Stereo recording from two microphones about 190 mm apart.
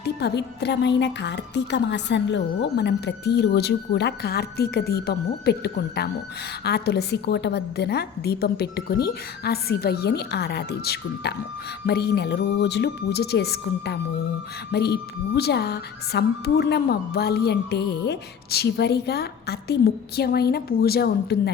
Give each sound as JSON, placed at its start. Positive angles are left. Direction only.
{"t": 0.0, "sound": "a woman's voice", "side_deg": 60}